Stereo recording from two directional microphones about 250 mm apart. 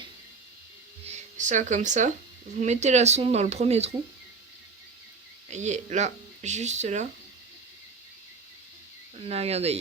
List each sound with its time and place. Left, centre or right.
1.0 s speech: right
5.5 s speech: right
9.1 s speech: right